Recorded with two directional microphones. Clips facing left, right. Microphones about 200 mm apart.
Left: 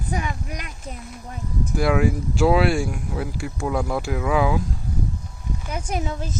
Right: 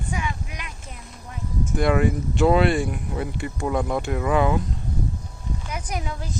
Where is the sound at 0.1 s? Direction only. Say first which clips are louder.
Left 3 dB; 40° left (ahead or behind).